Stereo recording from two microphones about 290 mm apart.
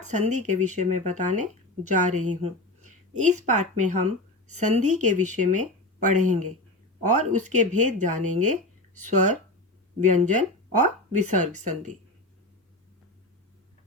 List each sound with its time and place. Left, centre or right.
0.0 s speech: right
2.4 s a sound: right
3.2 s speech: right